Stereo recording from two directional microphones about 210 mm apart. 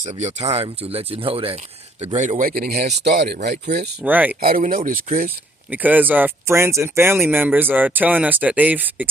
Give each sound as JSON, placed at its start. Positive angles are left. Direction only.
{"t": 0.0, "sound": "speech", "side_deg": -35}
{"t": 4.0, "sound": "speech", "side_deg": -10}
{"t": 4.4, "sound": "speech", "side_deg": -40}
{"t": 5.7, "sound": "speech", "side_deg": -10}